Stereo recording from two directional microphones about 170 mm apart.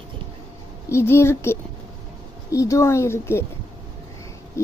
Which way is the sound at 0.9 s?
15° left (ahead or behind).